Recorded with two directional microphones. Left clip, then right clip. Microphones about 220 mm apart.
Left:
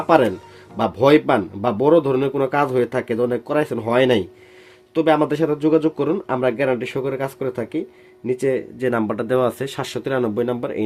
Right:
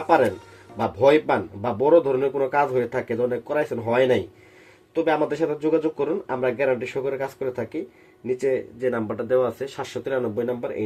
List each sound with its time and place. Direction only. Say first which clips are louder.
0.8 s speech: left 3 dB; 40° left (ahead or behind)